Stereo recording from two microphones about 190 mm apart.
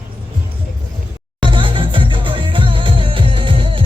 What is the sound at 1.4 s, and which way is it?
Music, 25° right (ahead or behind).